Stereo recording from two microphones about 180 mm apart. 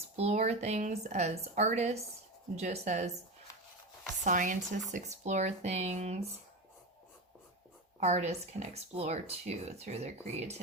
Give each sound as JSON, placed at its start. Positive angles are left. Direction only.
{"t": 0.2, "sound": "speech", "side_deg": -40}
{"t": 4.2, "sound": "speech", "side_deg": -45}
{"t": 7.9, "sound": "speech", "side_deg": -40}